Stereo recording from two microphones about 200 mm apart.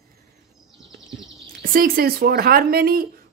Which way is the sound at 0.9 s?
Centre (ahead or behind).